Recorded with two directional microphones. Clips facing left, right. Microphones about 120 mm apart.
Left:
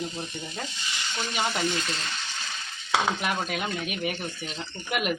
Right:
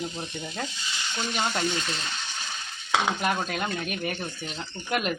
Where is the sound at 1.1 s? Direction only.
20° right (ahead or behind).